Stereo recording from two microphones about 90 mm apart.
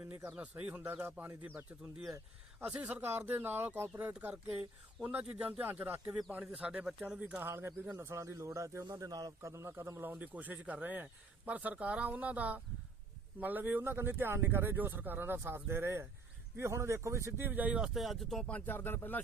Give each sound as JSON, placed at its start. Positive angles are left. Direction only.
{"t": 0.1, "sound": "speech", "side_deg": -20}
{"t": 2.6, "sound": "speech", "side_deg": -15}
{"t": 7.4, "sound": "speech", "side_deg": -25}
{"t": 18.4, "sound": "speech", "side_deg": 20}